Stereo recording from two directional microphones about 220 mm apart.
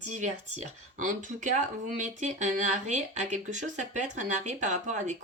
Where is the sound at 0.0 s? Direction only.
35° right (ahead or behind).